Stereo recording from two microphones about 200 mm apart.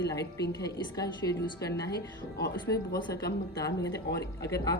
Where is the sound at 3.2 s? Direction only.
55° left (ahead or behind).